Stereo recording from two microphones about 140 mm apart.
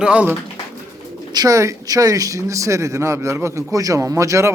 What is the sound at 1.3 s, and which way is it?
Speech, 25° right (ahead or behind).